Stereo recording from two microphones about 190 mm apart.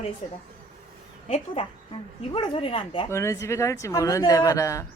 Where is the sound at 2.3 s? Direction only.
30° left (ahead or behind).